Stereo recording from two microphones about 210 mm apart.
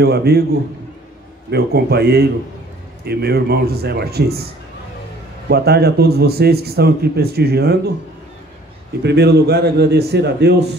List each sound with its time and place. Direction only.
0.0 s a man's voice: 50° right (ahead or behind)
1.5 s a man's voice: 50° right (ahead or behind)
5.5 s a man's voice: 50° right (ahead or behind)
9.0 s a man's voice: 50° right (ahead or behind)